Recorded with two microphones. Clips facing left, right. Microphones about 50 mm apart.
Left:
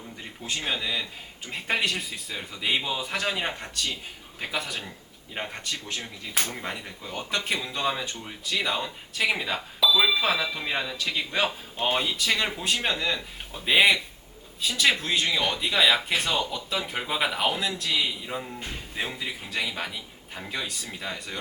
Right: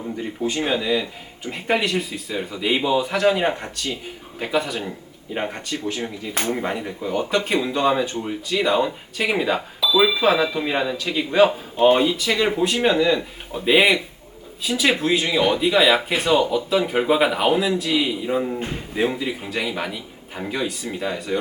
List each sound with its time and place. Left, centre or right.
0.2 s speech: centre